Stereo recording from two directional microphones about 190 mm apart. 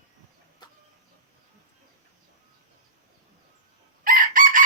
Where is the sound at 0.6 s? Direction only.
20° left (ahead or behind).